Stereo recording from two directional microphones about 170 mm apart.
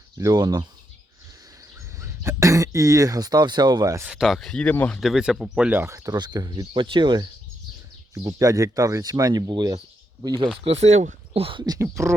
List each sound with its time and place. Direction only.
0.2 s speech: 20° right (ahead or behind)
2.0 s speech: 15° right (ahead or behind)
4.0 s speech: 5° right (ahead or behind); by 10.5 s 25° right (ahead or behind)
10.6 s speech: 40° right (ahead or behind); by 12.1 s 15° right (ahead or behind)